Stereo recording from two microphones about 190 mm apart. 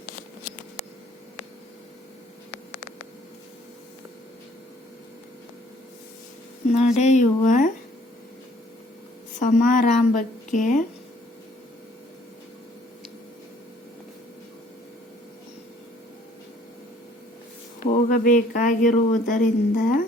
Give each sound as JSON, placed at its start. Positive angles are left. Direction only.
{"t": 6.7, "sound": "speech", "side_deg": 35}
{"t": 9.4, "sound": "a woman's voice", "side_deg": 45}
{"t": 17.7, "sound": "speech", "side_deg": 45}